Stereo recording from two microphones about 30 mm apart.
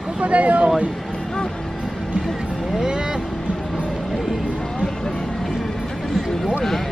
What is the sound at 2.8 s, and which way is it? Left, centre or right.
Vehicle, right.